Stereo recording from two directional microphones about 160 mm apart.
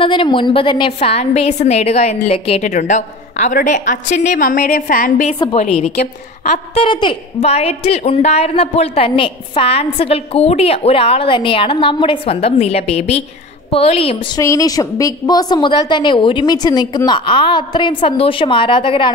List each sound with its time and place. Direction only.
0.0 s a woman's voice: 30° left (ahead or behind); by 5.3 s 60° left (ahead or behind)
5.6 s a woman's voice: 40° left (ahead or behind)
14.4 s a woman's voice: 20° left (ahead or behind)